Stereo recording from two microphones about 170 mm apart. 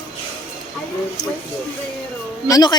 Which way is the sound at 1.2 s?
20° left (ahead or behind).